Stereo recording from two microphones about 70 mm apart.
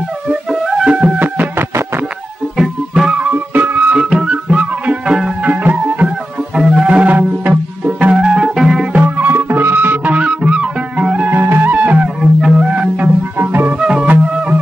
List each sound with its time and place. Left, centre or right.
0.3 s music: centre
2.5 s music: centre; by 4.0 s right
4.0 s music: centre
5.4 s music: right
6.0 s music: centre
9.0 s music: right
10.1 s music: centre
11.3 s music: right
12.2 s music: centre
12.6 s music: centre
13.4 s music: right
13.7 s music: centre